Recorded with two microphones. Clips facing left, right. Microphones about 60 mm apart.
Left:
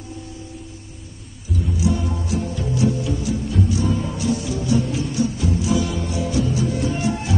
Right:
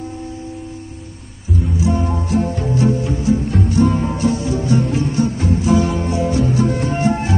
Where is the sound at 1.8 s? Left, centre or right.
Right.